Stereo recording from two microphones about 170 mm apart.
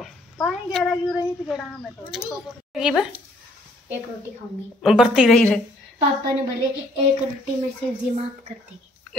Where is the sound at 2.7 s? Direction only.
5° right (ahead or behind).